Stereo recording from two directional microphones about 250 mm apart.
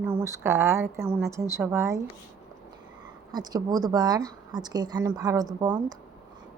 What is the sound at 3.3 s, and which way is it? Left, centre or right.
A woman's voice, centre.